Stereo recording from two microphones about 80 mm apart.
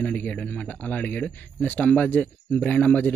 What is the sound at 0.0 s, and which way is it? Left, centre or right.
Speech, centre.